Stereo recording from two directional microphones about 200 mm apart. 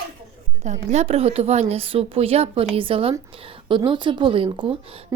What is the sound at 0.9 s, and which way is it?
A woman's voice, 30° right (ahead or behind).